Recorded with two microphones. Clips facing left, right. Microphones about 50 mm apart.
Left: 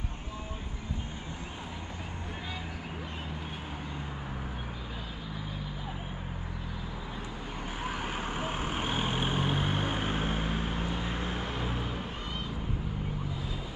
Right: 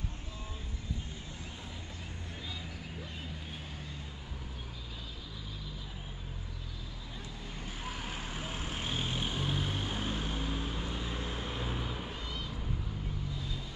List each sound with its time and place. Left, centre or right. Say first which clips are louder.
7.8 s vehicle: left 7 dB; centre